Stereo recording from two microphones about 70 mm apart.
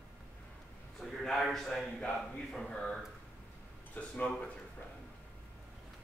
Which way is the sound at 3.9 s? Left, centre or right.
Left.